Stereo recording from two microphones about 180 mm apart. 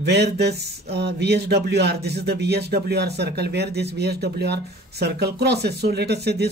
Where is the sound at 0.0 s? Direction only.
65° right (ahead or behind).